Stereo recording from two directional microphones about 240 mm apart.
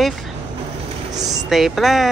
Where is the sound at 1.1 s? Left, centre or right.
Centre.